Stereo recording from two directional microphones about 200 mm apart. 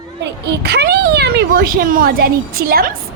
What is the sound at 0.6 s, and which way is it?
Speech, 55° right (ahead or behind).